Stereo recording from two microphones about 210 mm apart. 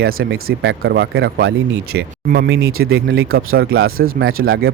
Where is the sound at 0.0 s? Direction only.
45° right (ahead or behind).